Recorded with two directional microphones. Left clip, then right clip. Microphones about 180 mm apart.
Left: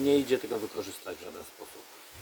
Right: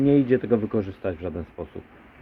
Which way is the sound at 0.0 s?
10° left (ahead or behind).